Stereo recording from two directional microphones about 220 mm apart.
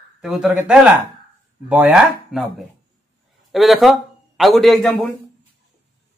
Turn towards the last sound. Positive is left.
turn(degrees=0)  # may be behind; listen again after turning